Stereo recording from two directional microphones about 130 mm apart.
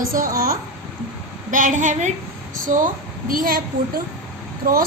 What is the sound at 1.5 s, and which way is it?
Speech, 80° right.